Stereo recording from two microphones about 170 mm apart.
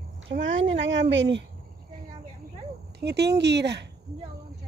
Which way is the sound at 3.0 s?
80° right.